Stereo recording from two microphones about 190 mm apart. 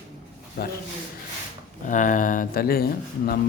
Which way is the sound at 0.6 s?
55° left (ahead or behind).